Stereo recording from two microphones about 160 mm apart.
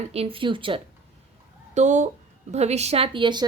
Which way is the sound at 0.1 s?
35° right (ahead or behind).